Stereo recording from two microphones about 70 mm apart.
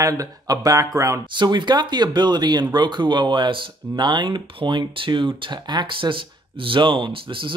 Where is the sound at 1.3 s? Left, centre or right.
Right.